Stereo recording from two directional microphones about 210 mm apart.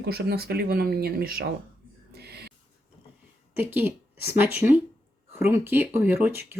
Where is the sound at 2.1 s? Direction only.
50° right (ahead or behind).